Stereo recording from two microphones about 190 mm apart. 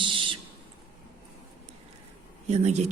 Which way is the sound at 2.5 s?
35° right (ahead or behind).